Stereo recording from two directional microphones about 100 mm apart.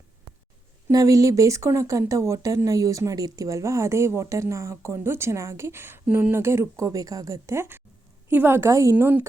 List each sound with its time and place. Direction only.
0.9 s speech: 35° right (ahead or behind)